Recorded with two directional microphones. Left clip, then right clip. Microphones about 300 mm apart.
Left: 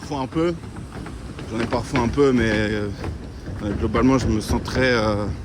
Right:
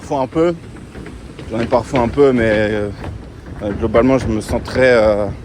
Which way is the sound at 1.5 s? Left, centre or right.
Centre.